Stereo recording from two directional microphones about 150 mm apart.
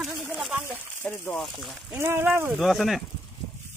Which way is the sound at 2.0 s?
15° right (ahead or behind).